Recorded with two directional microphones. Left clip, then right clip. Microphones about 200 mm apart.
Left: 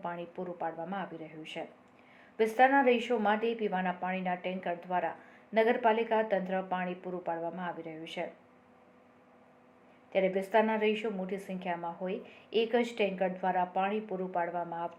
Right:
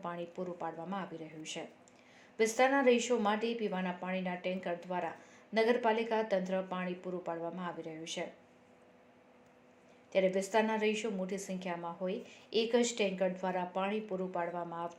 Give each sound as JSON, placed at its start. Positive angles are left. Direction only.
{"t": 0.0, "sound": "a woman's voice", "side_deg": -35}
{"t": 10.1, "sound": "a woman's voice", "side_deg": -35}